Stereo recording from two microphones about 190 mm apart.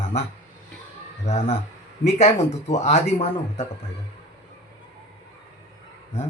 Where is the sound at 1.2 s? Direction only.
35° left (ahead or behind).